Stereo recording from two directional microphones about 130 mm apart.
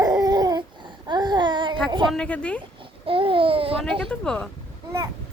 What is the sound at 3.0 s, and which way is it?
Babbling, 45° right (ahead or behind).